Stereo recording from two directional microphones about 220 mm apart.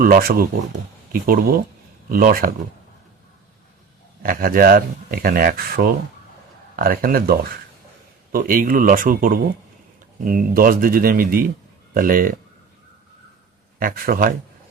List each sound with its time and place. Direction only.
0.0 s speech: 40° right (ahead or behind)
4.2 s speech: 40° right (ahead or behind)
13.7 s speech: 40° right (ahead or behind)